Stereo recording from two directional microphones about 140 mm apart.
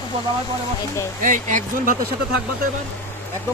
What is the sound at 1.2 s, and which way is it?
Speech, 65° right (ahead or behind).